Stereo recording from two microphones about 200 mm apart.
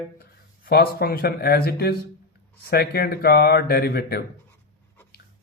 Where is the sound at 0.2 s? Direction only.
50° left (ahead or behind).